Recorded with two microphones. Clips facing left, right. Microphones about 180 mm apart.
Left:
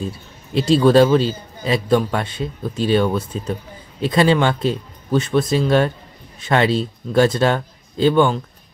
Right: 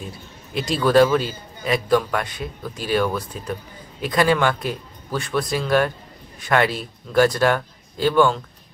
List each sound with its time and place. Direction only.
0.6 s a man's voice: 25° left (ahead or behind)